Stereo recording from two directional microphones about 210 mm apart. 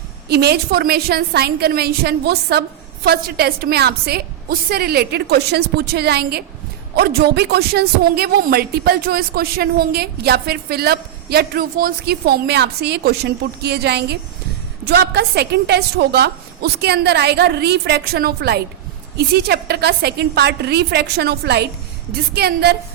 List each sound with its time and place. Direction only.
0.3 s a woman's voice: 50° right (ahead or behind)